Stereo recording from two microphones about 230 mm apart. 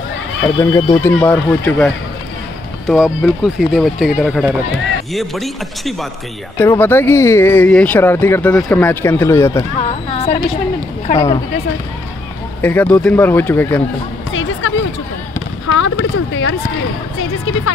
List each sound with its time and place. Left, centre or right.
0.4 s speech: centre
2.9 s speech: centre
9.8 s speech: left
11.1 s speech: centre
12.6 s speech: centre
14.3 s music: left
15.7 s a sound: left